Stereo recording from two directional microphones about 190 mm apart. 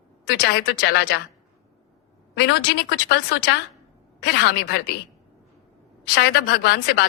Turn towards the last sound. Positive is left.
turn(degrees=60)  # may be behind; listen again after turning